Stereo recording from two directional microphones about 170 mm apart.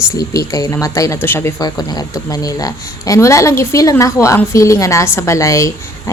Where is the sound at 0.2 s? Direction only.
20° left (ahead or behind).